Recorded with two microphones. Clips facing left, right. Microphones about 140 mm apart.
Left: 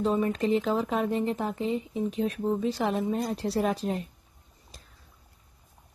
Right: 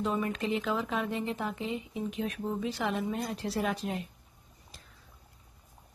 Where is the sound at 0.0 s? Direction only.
30° left (ahead or behind).